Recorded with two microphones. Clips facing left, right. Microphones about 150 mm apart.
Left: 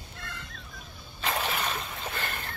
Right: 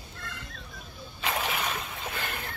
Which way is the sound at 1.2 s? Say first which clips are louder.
Even; 10° right (ahead or behind).